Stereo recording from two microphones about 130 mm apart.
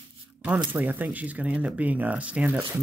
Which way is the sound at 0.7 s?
15° right (ahead or behind).